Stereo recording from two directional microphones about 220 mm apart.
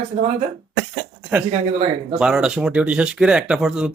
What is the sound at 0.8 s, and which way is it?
Speech, 5° right (ahead or behind).